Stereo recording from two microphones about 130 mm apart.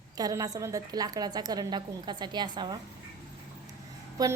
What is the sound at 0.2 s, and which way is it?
A woman's voice, 25° right (ahead or behind).